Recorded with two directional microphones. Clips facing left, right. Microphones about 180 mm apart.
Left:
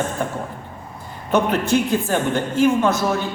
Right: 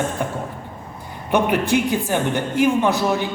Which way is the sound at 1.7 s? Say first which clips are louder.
Left 1 dB; 15° right (ahead or behind).